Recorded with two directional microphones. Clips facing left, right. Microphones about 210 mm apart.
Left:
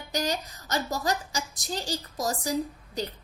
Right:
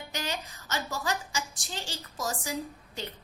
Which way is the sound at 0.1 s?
40° left (ahead or behind).